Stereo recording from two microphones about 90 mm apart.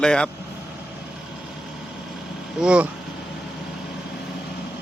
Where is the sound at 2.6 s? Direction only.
10° right (ahead or behind).